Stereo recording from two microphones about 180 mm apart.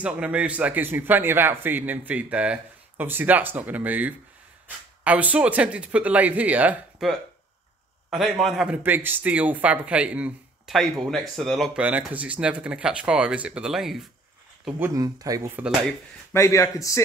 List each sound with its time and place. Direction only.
0.0 s a man's voice: 5° right (ahead or behind)
15.0 s speech: 20° right (ahead or behind)
16.3 s a man's voice: 15° left (ahead or behind)